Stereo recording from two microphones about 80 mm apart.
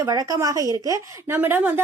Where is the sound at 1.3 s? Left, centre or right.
Right.